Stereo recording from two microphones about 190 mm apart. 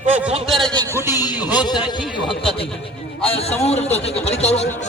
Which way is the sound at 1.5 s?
20° left (ahead or behind).